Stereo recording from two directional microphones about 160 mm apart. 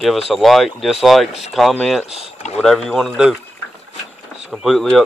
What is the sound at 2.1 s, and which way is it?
Speech, 40° left (ahead or behind).